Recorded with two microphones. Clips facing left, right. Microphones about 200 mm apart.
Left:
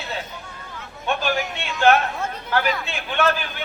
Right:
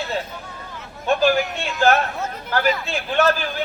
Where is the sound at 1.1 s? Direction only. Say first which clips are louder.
Right 6 dB; 40° right (ahead or behind).